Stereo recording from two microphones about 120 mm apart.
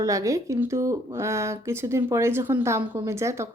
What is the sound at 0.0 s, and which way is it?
Speech, 25° right (ahead or behind).